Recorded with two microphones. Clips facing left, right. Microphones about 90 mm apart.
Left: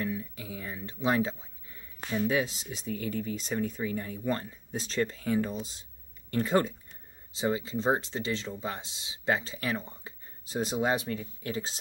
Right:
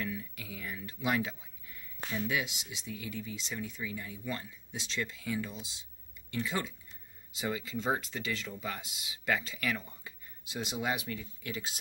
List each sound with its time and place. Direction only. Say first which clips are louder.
0.0 s speech: left 5 dB; 30° left (ahead or behind)
7.3 s speech: left 6 dB; 30° left (ahead or behind)